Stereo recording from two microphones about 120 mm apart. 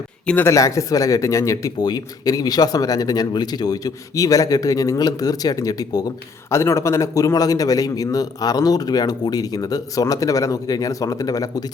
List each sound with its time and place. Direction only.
0.3 s speech: 15° left (ahead or behind)
0.5 s speech: 25° left (ahead or behind)